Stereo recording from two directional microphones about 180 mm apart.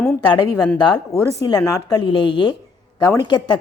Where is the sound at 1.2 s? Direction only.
20° left (ahead or behind).